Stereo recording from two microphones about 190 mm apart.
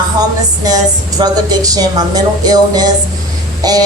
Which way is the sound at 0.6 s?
20° right (ahead or behind).